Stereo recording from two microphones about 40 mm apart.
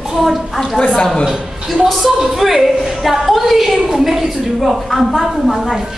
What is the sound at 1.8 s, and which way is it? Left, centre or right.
A woman's voice, centre.